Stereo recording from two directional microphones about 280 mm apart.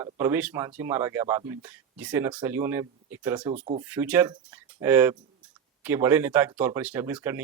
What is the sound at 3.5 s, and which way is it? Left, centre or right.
Speech, right.